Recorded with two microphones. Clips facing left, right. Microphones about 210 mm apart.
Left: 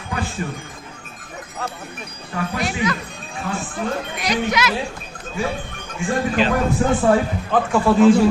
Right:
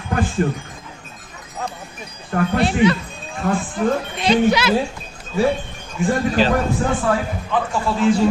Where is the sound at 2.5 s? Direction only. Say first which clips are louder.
Right 7 dB; 30° right (ahead or behind).